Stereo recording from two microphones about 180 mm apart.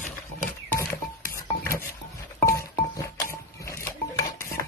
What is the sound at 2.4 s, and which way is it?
Music, 15° left (ahead or behind).